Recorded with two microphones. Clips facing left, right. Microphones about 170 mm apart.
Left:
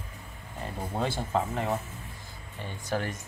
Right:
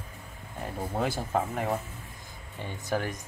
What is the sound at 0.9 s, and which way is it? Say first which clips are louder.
Speech: even; 10° right (ahead or behind).